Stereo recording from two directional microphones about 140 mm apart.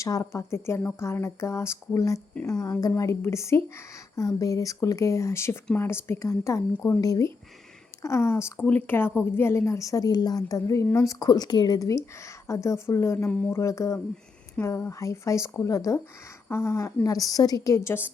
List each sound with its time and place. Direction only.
0.0 s a woman's voice: 20° left (ahead or behind)